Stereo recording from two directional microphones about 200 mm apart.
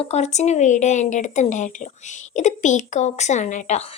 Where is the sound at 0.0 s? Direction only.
35° left (ahead or behind).